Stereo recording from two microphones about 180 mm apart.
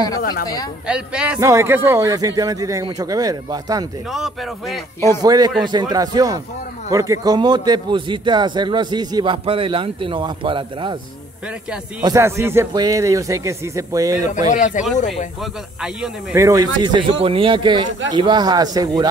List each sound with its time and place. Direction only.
0.2 s speech: 55° left (ahead or behind)
0.8 s a man's voice: 5° right (ahead or behind)
4.1 s speech: centre (ahead or behind)
5.2 s a man's voice: 20° right (ahead or behind)
12.0 s a man's voice: 15° right (ahead or behind)
14.5 s speech: 45° left (ahead or behind)
16.3 s a man's voice: 20° right (ahead or behind)